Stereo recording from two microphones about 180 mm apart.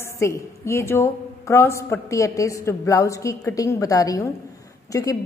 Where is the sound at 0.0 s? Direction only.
15° left (ahead or behind).